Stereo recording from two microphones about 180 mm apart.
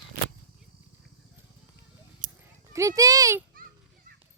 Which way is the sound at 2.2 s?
45° right (ahead or behind).